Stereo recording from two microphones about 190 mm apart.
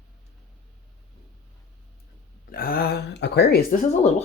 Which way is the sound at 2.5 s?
50° left (ahead or behind).